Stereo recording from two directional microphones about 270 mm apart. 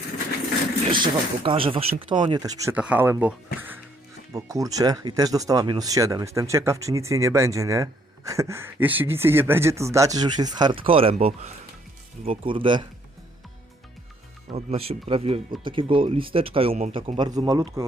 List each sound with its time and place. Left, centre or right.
0.9 s speech: centre
14.5 s speech: right